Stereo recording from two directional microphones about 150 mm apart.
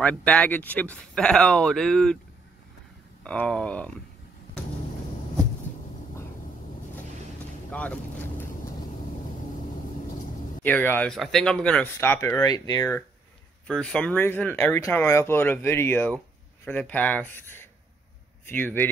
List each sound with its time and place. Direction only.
0.0 s speech: 10° left (ahead or behind)
3.3 s speech: 5° left (ahead or behind)
7.7 s speech: 10° left (ahead or behind)
10.6 s speech: 10° left (ahead or behind)
13.7 s speech: 5° left (ahead or behind)